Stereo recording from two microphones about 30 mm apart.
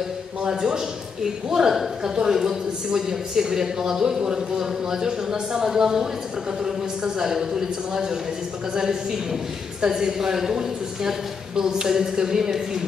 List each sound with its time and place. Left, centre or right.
0.5 s a woman's voice: right